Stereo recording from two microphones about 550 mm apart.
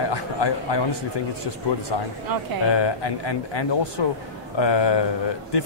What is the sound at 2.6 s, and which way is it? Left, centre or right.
Speech, left.